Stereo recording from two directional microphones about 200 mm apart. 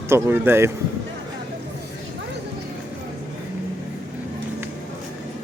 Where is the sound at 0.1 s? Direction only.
10° right (ahead or behind).